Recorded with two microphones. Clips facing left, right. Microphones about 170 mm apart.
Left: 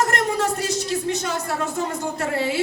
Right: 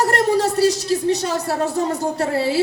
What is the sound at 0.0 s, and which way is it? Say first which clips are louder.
A woman's voice: right 4 dB; 35° right (ahead or behind).